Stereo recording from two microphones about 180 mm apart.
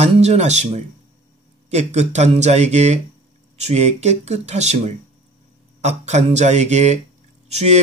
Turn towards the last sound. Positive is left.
turn(degrees=-35)  # may be behind; listen again after turning